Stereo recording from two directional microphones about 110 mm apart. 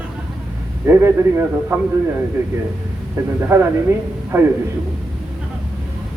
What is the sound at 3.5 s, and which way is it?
Speech, 25° right (ahead or behind).